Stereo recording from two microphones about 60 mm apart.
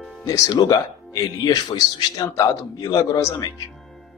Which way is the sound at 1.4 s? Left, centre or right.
Left.